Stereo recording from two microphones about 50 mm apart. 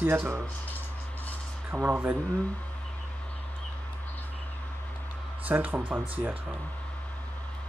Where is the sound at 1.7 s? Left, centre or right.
Right.